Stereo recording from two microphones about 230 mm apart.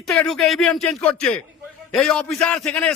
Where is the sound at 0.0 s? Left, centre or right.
Centre.